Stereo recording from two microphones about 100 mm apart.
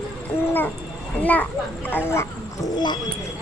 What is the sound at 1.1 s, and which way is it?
Children playing, 15° left (ahead or behind).